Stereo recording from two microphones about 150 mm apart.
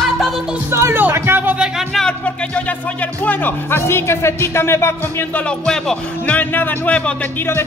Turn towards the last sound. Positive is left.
turn(degrees=10)  # may be behind; listen again after turning